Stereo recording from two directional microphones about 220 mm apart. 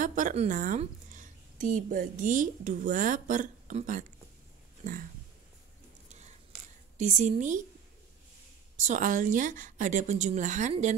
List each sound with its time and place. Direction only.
0.0 s a woman's voice: 35° right (ahead or behind)
6.0 s a sound: 30° right (ahead or behind)
7.0 s a woman's voice: 30° right (ahead or behind)
8.7 s a woman's voice: 35° right (ahead or behind)